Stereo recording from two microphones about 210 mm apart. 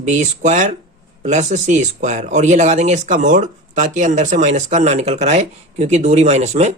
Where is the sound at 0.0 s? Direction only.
35° right (ahead or behind).